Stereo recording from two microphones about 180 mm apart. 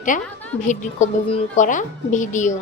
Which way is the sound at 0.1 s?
45° left (ahead or behind).